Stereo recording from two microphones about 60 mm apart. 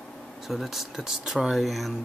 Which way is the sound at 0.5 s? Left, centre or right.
Centre.